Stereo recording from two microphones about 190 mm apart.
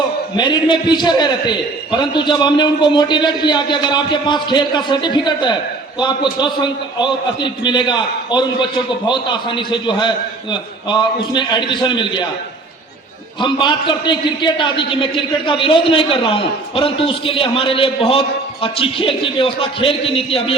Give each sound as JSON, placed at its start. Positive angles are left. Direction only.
{"t": 0.3, "sound": "a man's voice", "side_deg": 25}
{"t": 13.4, "sound": "a man's voice", "side_deg": 25}